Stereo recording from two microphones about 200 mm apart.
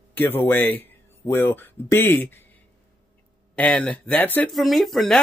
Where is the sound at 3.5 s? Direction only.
5° left (ahead or behind).